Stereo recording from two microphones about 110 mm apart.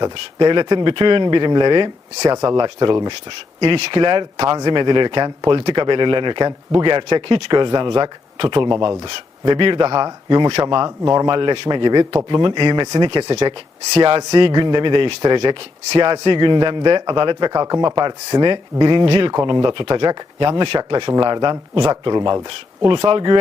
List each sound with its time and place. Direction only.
0.0 s speech: 45° right (ahead or behind)
2.3 s speech: 35° right (ahead or behind); by 10.8 s 50° right (ahead or behind)
10.8 s speech: 30° right (ahead or behind)
13.3 s speech: 55° right (ahead or behind)
19.0 s speech: 55° right (ahead or behind)
19.5 s speech: 45° right (ahead or behind)